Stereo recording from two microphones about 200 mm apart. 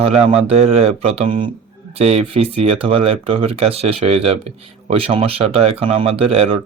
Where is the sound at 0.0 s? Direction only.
30° right (ahead or behind).